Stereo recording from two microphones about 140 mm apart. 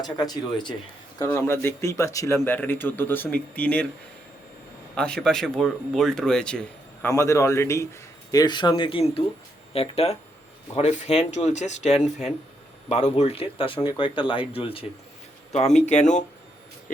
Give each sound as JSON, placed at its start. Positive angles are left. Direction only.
{"t": 0.0, "sound": "a man's voice", "side_deg": 30}
{"t": 1.2, "sound": "speech", "side_deg": 20}
{"t": 4.9, "sound": "speech", "side_deg": 5}
{"t": 7.1, "sound": "a man's voice", "side_deg": 20}
{"t": 15.5, "sound": "speech", "side_deg": 55}